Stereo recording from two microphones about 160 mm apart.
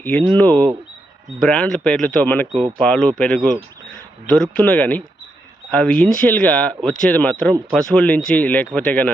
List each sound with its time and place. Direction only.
0.0 s speech: 10° left (ahead or behind)